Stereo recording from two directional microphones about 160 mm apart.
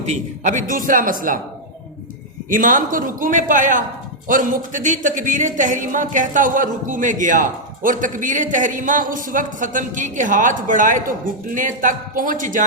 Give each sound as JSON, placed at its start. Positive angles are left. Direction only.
{"t": 0.1, "sound": "a man's voice", "side_deg": -50}
{"t": 2.5, "sound": "a man's voice", "side_deg": -55}